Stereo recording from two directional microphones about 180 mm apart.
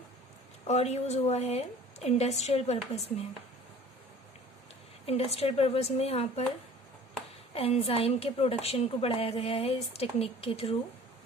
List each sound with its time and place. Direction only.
0.7 s a woman's voice: 40° left (ahead or behind)
5.0 s a woman's voice: 35° left (ahead or behind)
7.5 s a woman's voice: 35° left (ahead or behind)